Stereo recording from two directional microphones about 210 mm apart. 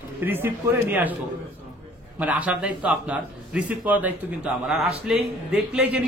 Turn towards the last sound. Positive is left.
turn(degrees=-5)  # may be behind; listen again after turning